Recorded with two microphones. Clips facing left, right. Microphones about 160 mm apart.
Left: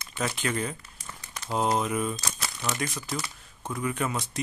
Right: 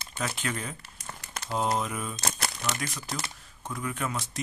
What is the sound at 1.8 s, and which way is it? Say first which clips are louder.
Speech: left 5 dB; 5° left (ahead or behind).